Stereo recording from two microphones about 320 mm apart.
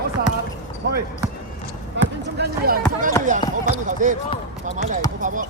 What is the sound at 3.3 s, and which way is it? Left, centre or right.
Speech, right.